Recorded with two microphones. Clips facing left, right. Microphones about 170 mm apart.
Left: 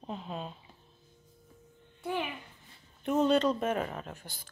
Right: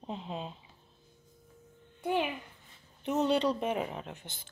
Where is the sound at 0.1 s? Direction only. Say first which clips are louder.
Even; 20° right (ahead or behind).